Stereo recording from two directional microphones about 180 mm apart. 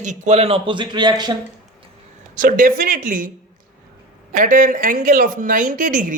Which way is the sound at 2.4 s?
50° right (ahead or behind).